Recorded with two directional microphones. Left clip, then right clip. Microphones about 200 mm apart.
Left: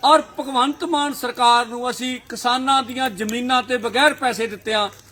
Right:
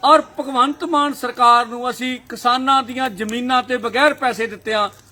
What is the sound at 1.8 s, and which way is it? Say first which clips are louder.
Speech: right 2 dB; 25° right (ahead or behind).